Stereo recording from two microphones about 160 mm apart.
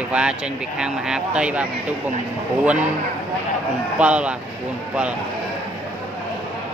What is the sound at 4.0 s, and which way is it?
Speech, 5° right (ahead or behind).